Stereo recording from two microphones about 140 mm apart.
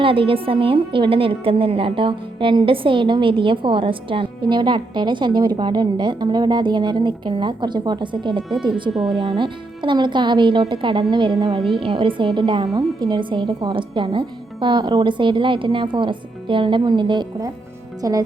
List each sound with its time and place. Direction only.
0.0 s a woman's voice: 40° right (ahead or behind)
8.9 s speech: centre (ahead or behind)
9.2 s a woman's voice: 35° right (ahead or behind)